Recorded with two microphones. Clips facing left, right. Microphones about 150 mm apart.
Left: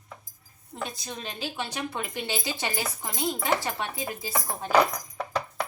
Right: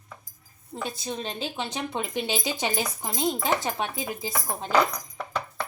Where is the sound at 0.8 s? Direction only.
25° right (ahead or behind).